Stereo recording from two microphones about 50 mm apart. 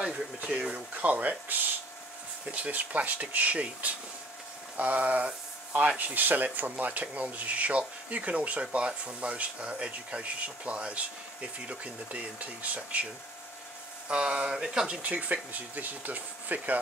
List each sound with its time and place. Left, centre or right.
0.4 s speech: right
2.4 s speech: right
15.0 s speech: right